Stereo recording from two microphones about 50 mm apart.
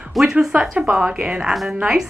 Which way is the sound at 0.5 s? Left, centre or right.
Centre.